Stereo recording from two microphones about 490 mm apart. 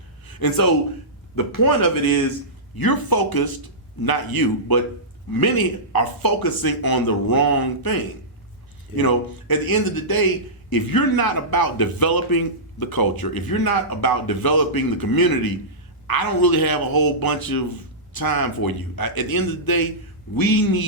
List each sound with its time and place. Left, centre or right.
0.3 s a man's voice: left
9.0 s a man's voice: left